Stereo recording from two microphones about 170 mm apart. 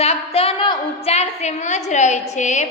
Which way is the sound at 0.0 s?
35° left (ahead or behind).